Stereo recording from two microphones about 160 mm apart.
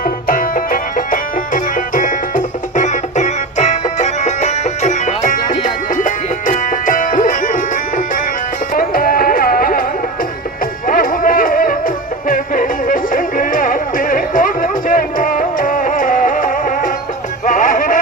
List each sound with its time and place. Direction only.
0.3 s music: 60° left (ahead or behind)
10.8 s a sound: 60° left (ahead or behind)
12.3 s music: 55° left (ahead or behind)